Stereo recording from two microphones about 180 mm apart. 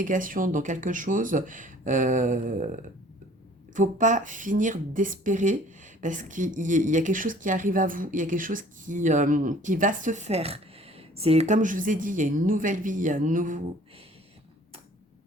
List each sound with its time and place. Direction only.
0.0 s speech: 50° right (ahead or behind)